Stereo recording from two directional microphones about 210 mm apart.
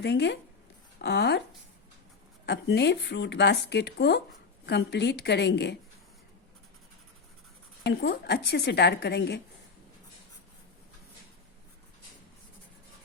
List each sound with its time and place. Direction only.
0.0 s speech: 55° left (ahead or behind)
2.5 s speech: 55° left (ahead or behind)
7.9 s speech: 50° left (ahead or behind)